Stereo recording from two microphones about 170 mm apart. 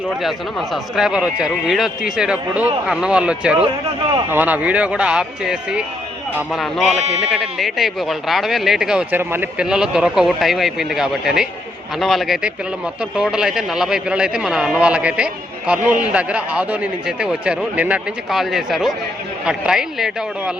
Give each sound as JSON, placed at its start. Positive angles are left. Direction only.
{"t": 0.2, "sound": "a man's voice", "side_deg": 0}